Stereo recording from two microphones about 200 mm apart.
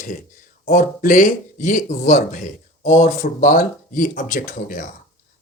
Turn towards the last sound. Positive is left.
turn(degrees=40)  # may be behind; listen again after turning